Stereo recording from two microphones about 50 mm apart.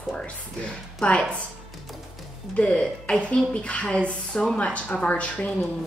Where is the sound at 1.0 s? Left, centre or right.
Centre.